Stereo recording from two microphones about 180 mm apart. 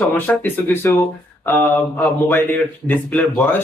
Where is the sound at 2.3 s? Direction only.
10° left (ahead or behind).